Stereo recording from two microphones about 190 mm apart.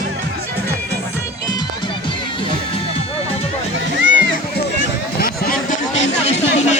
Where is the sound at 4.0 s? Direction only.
75° right (ahead or behind).